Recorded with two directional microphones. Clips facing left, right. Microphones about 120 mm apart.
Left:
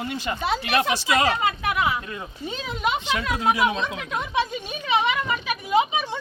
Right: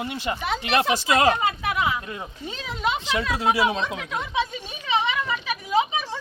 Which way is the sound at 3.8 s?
5° left (ahead or behind).